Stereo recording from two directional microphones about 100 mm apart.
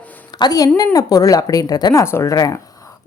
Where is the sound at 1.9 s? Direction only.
30° left (ahead or behind).